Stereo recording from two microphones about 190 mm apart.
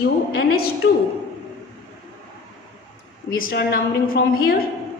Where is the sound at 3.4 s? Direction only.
50° left (ahead or behind).